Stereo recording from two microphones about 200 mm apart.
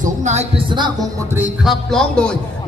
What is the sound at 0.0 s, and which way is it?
Speech, 35° right (ahead or behind).